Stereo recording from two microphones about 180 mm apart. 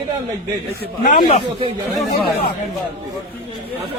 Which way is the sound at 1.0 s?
45° left (ahead or behind).